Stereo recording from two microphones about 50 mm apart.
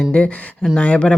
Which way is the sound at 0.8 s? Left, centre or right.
Left.